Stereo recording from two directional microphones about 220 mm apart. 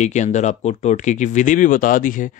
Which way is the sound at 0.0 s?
30° left (ahead or behind).